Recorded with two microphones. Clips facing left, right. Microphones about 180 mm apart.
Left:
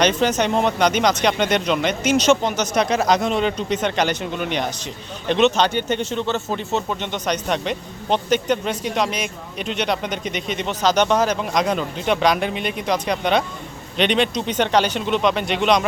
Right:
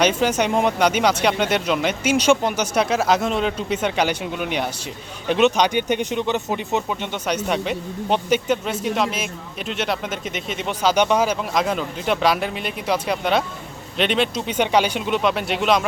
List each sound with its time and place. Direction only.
0.0 s speech: 10° right (ahead or behind)